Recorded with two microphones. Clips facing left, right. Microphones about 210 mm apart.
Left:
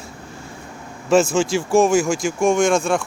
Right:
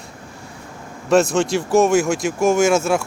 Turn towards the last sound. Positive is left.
turn(degrees=-5)  # may be behind; listen again after turning